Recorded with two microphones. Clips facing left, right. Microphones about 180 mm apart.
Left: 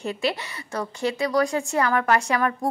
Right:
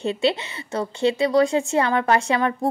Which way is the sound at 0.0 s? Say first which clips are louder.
Right 5 dB; 25° right (ahead or behind).